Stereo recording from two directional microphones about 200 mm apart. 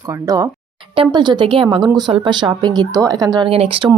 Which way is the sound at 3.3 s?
30° right (ahead or behind).